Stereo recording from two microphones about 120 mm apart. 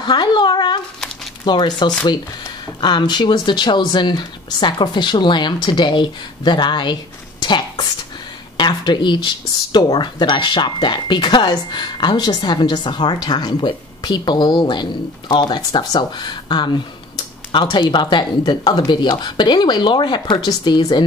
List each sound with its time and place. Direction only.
0.0 s speech: 40° left (ahead or behind)